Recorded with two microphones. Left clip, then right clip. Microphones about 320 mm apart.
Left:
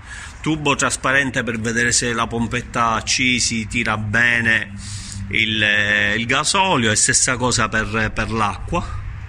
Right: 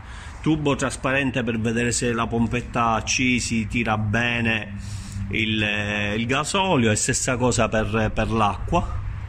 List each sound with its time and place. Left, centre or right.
0.4 s speech: centre